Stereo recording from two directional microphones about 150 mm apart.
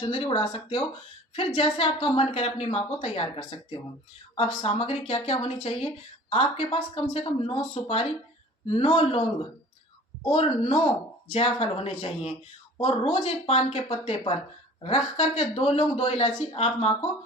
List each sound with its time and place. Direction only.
0.0 s a woman's voice: 35° left (ahead or behind)
4.6 s a woman's voice: 40° left (ahead or behind)